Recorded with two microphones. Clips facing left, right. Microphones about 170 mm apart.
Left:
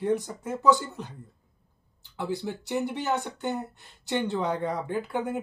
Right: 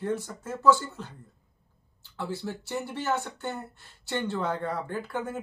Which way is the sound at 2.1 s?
15° left (ahead or behind).